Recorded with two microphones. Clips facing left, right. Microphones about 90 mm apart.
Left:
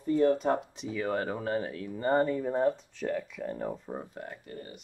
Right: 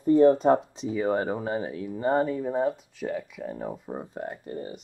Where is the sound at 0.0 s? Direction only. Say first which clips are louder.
Right 7 dB; 35° right (ahead or behind).